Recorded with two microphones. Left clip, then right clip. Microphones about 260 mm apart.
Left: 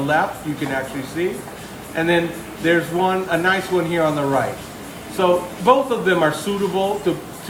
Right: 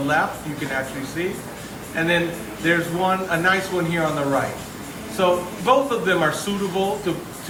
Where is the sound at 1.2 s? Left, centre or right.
Left.